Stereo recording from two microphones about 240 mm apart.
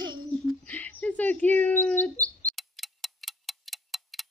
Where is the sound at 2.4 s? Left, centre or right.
Centre.